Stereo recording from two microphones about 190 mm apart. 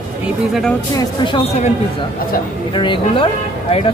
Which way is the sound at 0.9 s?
25° left (ahead or behind).